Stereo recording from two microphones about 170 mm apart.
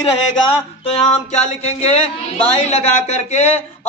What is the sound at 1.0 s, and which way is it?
A man's voice, 40° left (ahead or behind).